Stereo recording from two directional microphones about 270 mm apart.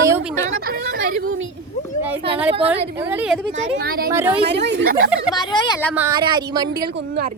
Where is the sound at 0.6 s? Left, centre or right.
Right.